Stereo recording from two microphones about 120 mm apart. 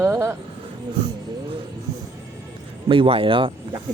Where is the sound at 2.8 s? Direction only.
45° right (ahead or behind).